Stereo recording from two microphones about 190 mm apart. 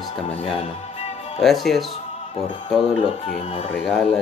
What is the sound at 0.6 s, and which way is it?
Music, 35° left (ahead or behind).